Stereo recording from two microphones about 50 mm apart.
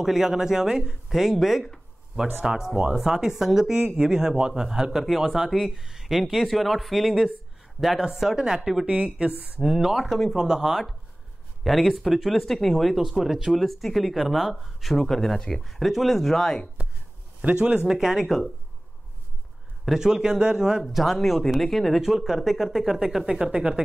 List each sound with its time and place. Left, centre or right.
0.0 s a man's voice: centre
8.8 s speech: right
9.6 s speech: centre
17.5 s speech: right
17.8 s a man's voice: centre
18.2 s speech: centre
19.8 s a man's voice: centre
20.8 s a man's voice: centre; by 23.8 s right